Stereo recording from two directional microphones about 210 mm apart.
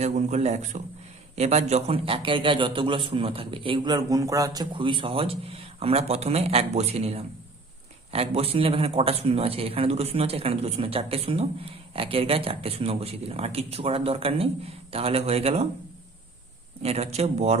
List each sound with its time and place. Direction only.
0.0 s speech: 35° right (ahead or behind)
16.8 s speech: 30° right (ahead or behind)